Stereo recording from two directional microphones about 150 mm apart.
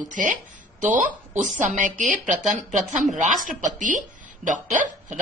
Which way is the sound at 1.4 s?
55° right (ahead or behind).